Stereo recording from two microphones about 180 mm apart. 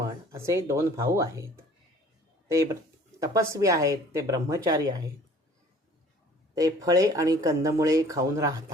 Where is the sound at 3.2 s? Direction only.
20° right (ahead or behind).